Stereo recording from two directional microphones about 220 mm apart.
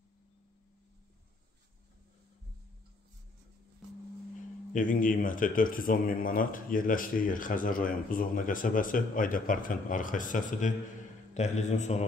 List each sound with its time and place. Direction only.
4.7 s speech: 40° left (ahead or behind)